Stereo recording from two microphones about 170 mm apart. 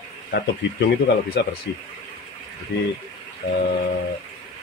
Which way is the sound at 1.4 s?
90° left.